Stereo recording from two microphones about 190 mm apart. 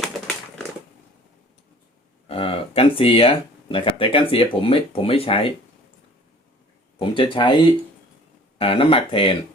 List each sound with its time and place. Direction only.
2.2 s speech: 30° left (ahead or behind)
7.0 s speech: 25° left (ahead or behind)